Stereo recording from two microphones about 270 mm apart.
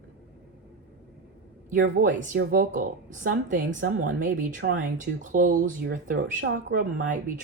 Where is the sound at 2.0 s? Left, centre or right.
Right.